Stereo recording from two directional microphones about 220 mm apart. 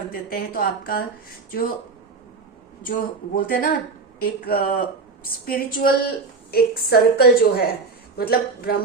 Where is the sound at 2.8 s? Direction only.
40° left (ahead or behind).